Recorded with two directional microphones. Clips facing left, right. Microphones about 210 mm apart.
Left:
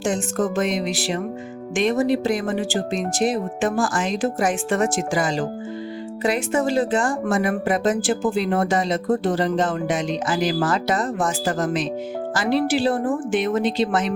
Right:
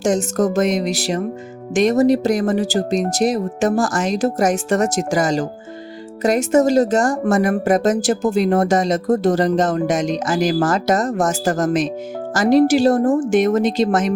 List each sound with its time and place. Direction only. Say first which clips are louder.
0.0 s speech: right 5 dB; 40° right (ahead or behind)